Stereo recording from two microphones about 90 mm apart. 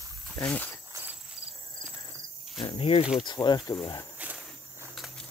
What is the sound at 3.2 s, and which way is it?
Speech, 55° left (ahead or behind).